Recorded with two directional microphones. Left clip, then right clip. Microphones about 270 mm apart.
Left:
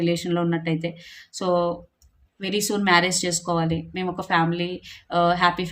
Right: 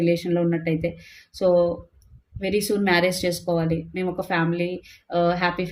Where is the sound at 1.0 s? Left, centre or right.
Left.